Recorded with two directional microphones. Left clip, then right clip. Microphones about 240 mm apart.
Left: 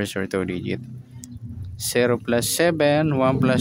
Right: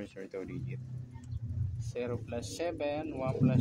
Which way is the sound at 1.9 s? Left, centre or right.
Left.